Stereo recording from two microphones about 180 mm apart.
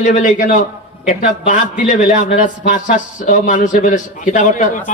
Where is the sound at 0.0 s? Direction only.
40° left (ahead or behind).